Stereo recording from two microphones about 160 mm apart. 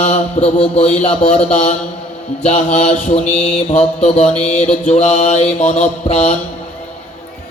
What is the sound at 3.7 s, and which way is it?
Mantra, 40° left (ahead or behind).